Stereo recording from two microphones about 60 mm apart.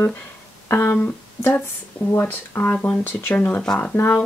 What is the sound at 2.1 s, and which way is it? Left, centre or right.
Speech, left.